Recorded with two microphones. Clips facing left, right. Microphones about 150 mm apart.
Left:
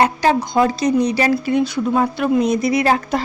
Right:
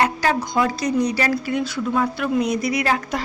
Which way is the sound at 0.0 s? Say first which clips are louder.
Left 4 dB; 25° left (ahead or behind).